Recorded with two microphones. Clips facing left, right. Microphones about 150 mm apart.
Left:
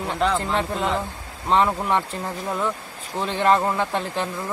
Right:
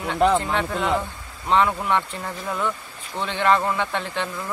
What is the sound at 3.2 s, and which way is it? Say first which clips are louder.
Speech: left 1 dB; 35° left (ahead or behind).